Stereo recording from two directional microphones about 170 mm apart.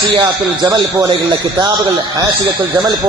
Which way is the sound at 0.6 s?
25° right (ahead or behind).